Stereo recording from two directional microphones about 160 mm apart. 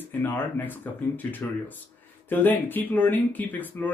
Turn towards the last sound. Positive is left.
turn(degrees=10)  # may be behind; listen again after turning